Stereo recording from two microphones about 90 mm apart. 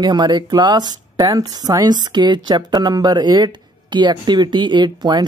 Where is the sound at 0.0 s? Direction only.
55° right (ahead or behind).